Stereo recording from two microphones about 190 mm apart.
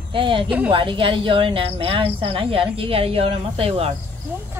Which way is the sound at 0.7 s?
25° right (ahead or behind).